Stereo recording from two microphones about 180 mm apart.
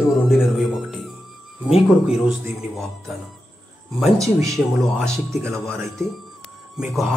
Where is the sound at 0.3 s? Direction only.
Centre (ahead or behind).